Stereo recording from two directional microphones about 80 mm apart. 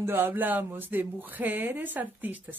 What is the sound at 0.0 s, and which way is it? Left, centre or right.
Speech, right.